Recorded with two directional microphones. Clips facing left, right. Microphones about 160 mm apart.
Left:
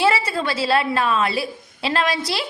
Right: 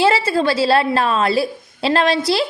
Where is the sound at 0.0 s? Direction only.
30° right (ahead or behind).